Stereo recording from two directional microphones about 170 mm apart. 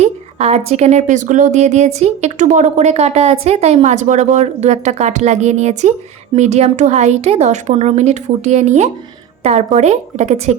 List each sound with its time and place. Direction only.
0.0 s a woman's voice: 40° right (ahead or behind)